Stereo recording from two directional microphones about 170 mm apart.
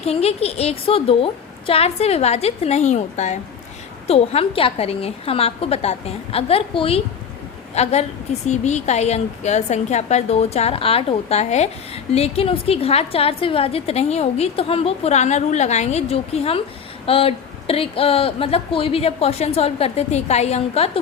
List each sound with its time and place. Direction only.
0.0 s a woman's voice: 35° left (ahead or behind)